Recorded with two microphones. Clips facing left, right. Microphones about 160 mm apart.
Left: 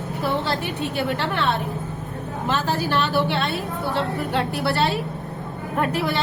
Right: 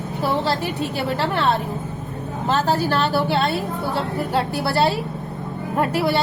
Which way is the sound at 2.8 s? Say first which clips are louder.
Right 2 dB; 40° right (ahead or behind).